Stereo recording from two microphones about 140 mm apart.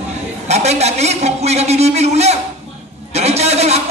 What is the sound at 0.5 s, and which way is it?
A man's voice, 50° right (ahead or behind).